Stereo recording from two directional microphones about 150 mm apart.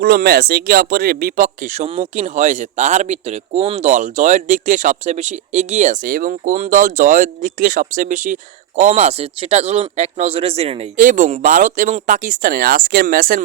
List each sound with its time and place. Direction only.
0.0 s speech: 90° right; by 10.8 s 40° right (ahead or behind)
10.9 s speech: 60° right (ahead or behind)